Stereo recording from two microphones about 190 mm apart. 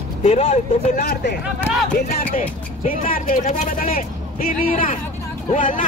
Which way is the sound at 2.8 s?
40° left (ahead or behind).